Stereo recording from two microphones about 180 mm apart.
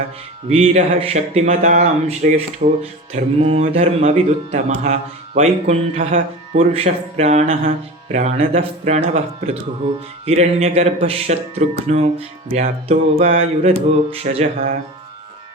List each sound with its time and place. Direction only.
0.4 s speech: 35° right (ahead or behind)
2.6 s speech: 55° right (ahead or behind)
3.1 s speech: 35° right (ahead or behind)
10.2 s speech: 35° right (ahead or behind)